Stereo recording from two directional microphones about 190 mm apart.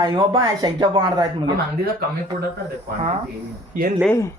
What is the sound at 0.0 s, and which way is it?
Speech, 20° right (ahead or behind).